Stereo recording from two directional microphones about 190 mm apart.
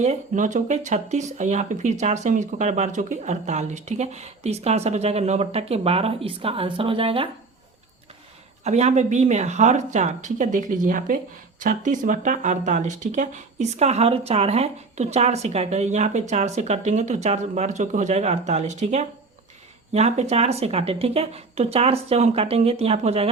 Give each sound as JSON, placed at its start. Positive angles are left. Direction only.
{"t": 0.0, "sound": "speech", "side_deg": -40}
{"t": 8.6, "sound": "speech", "side_deg": -35}